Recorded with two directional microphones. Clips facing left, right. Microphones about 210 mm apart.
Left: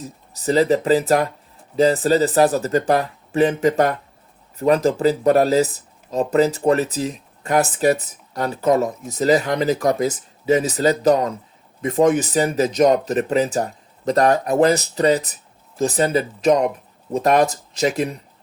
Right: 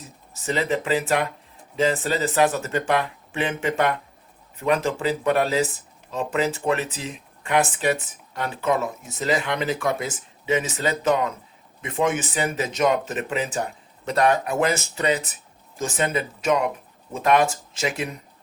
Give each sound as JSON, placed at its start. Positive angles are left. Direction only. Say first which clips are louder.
{"t": 0.3, "sound": "speech", "louder": "left 8 dB", "side_deg": 35}